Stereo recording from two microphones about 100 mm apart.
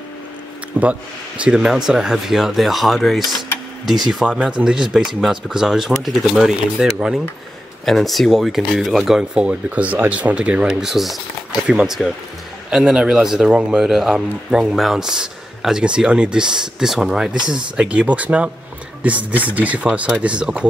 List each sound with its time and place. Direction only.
0.8 s a man's voice: 15° right (ahead or behind)